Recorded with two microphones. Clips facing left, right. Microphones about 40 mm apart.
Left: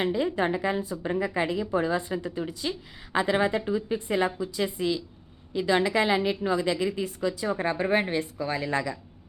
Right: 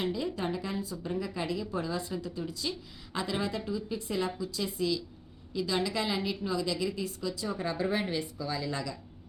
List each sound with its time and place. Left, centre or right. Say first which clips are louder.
0.0 s a woman's voice: left 7 dB; left